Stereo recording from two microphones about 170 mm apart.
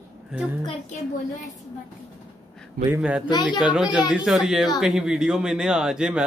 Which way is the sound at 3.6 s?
5° right (ahead or behind).